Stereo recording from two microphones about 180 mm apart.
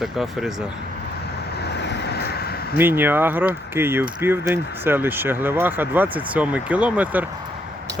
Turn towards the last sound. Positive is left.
turn(degrees=-10)  # may be behind; listen again after turning